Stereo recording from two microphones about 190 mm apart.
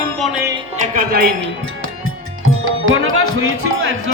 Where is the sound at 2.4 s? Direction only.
90° right.